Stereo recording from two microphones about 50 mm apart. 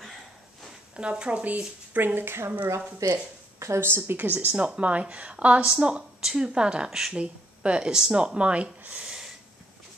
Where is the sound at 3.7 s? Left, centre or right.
Right.